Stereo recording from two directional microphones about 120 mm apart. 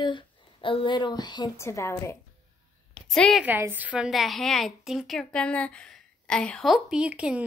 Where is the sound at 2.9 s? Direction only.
5° left (ahead or behind).